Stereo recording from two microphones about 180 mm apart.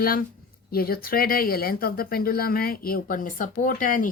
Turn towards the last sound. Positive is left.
turn(degrees=45)  # may be behind; listen again after turning